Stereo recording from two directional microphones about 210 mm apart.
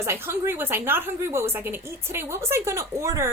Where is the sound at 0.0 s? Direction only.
10° right (ahead or behind).